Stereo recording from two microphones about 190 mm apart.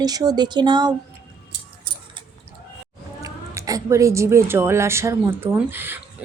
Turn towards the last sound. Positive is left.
turn(degrees=-10)  # may be behind; listen again after turning